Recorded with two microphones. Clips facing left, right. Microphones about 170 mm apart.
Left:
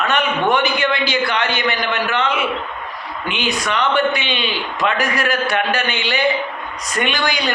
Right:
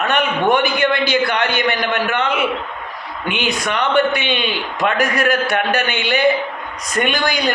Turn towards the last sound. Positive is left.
turn(degrees=-45)  # may be behind; listen again after turning